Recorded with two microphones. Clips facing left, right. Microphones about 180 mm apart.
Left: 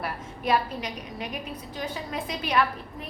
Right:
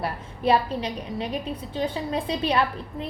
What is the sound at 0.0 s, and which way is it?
A woman's voice, 30° right (ahead or behind).